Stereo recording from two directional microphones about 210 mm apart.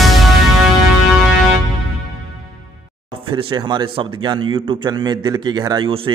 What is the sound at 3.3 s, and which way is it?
A man's voice, 25° right (ahead or behind).